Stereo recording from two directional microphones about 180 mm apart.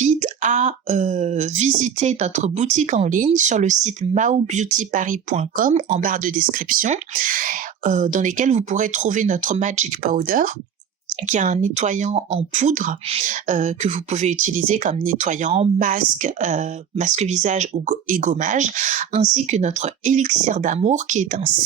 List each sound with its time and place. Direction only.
0.0 s speech: 45° right (ahead or behind)